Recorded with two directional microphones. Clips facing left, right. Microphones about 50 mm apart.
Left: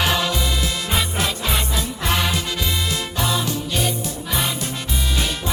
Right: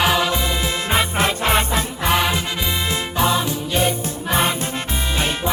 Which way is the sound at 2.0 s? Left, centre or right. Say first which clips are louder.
Right 3 dB; right.